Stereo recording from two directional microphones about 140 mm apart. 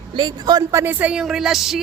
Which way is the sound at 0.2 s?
30° right (ahead or behind).